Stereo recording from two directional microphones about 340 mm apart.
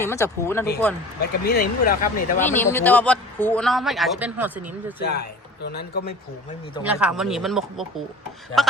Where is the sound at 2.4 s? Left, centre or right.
Centre.